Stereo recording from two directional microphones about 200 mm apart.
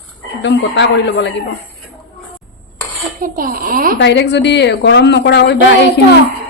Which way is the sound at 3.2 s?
45° right (ahead or behind).